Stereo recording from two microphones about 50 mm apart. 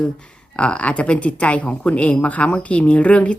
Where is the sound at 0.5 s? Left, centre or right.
Left.